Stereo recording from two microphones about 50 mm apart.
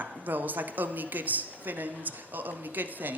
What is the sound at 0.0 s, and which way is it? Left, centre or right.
A woman's voice, right.